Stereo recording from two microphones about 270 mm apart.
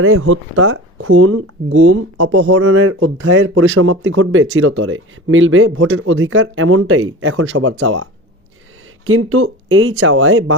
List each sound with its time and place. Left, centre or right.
0.0 s speech: right
9.0 s speech: right